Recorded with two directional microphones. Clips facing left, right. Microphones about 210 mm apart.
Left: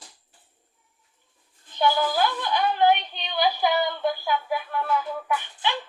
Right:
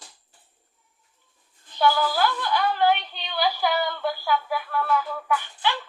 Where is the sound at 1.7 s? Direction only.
20° left (ahead or behind).